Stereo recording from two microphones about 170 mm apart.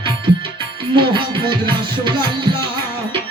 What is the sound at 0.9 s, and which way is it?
Music, 30° right (ahead or behind).